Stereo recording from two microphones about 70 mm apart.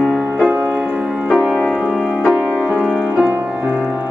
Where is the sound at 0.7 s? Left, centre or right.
Centre.